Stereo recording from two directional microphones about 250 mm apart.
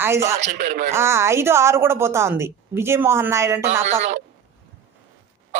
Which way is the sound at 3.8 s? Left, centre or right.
Right.